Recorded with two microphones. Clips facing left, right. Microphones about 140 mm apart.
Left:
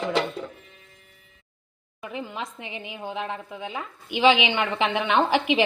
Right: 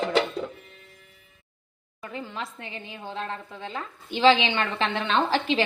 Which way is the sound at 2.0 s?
15° left (ahead or behind).